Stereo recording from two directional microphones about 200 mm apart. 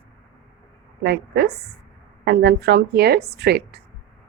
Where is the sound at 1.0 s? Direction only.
55° right (ahead or behind).